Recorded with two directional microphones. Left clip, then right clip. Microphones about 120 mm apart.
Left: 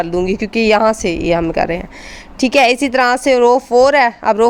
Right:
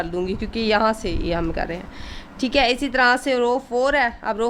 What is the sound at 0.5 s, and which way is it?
A woman's voice, 60° left (ahead or behind).